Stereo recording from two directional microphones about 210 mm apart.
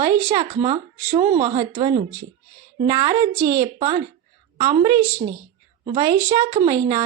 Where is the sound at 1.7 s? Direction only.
25° right (ahead or behind).